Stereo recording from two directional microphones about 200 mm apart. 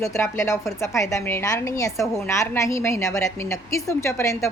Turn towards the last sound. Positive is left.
turn(degrees=15)  # may be behind; listen again after turning